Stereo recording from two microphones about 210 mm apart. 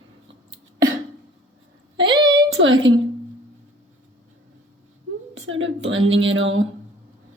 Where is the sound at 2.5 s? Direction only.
65° right (ahead or behind).